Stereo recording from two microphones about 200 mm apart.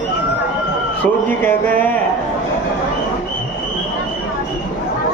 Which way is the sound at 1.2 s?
10° left (ahead or behind).